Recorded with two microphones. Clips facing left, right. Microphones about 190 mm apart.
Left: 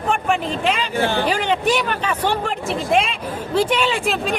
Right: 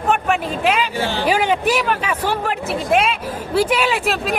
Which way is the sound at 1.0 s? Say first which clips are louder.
Left 2 dB; 55° left (ahead or behind).